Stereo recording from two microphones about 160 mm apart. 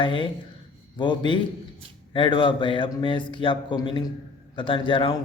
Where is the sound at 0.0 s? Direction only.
30° left (ahead or behind).